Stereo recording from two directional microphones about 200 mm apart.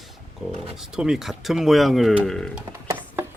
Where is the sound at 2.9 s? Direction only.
10° right (ahead or behind).